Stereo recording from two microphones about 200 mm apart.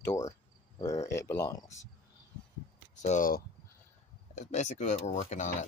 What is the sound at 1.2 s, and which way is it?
Speech, 15° left (ahead or behind).